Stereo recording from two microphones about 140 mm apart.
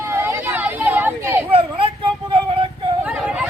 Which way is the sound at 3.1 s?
5° right (ahead or behind).